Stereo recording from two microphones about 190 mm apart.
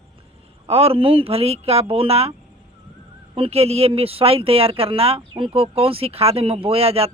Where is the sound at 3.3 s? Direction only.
30° right (ahead or behind).